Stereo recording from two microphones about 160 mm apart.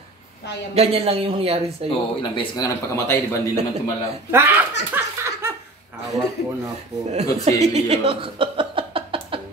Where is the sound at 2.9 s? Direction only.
15° left (ahead or behind).